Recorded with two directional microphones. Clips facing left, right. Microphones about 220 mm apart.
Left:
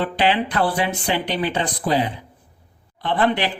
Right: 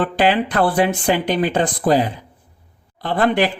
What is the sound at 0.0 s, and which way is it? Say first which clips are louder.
Speech: right 3 dB; 50° right (ahead or behind).